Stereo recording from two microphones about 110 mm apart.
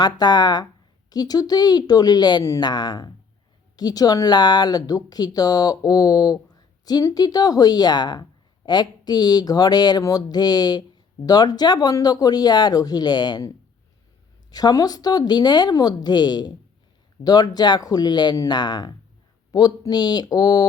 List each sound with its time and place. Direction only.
0.0 s speech: 40° left (ahead or behind)
14.5 s speech: 35° left (ahead or behind)